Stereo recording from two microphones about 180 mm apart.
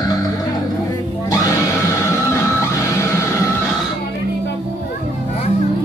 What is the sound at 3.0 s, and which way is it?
Music, 15° left (ahead or behind).